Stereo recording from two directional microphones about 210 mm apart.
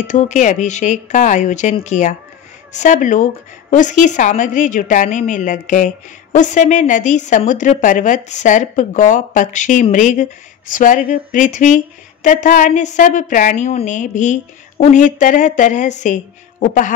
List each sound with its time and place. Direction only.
0.0 s a woman's voice: 35° left (ahead or behind)